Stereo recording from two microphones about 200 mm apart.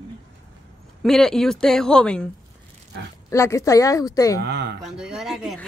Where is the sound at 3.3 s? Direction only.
15° left (ahead or behind).